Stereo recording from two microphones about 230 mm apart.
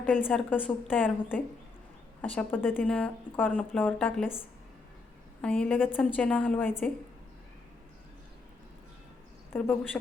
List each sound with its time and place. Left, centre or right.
0.3 s a woman's voice: centre
9.5 s a woman's voice: centre